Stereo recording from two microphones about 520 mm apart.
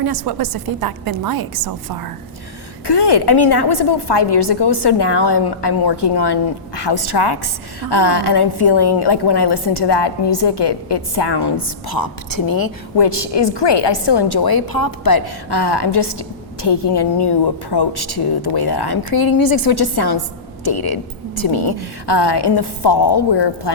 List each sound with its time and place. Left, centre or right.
0.0 s a woman's voice: right
2.8 s a woman's voice: left